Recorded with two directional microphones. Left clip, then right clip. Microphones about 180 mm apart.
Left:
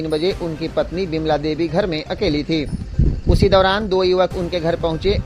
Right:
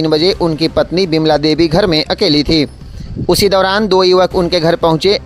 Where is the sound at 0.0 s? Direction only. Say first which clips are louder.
Right 9 dB; 40° right (ahead or behind).